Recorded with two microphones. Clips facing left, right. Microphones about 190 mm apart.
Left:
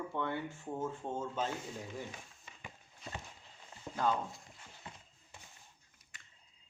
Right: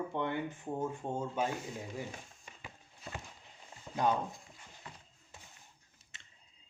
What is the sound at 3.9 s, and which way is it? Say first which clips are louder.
Speech: right 2 dB; 20° right (ahead or behind).